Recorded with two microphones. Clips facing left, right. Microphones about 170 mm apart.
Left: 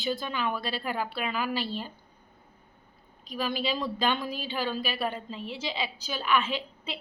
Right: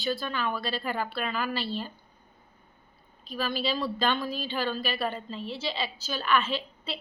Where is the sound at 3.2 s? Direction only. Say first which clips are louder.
Even; 15° left (ahead or behind).